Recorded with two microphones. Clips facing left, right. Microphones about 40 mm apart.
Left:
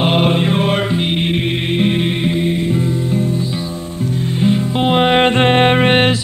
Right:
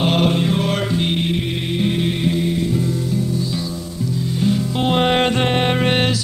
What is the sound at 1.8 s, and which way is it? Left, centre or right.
Music, left.